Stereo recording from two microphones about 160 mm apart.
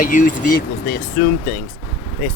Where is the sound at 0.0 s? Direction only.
55° left (ahead or behind); by 1.3 s 85° left.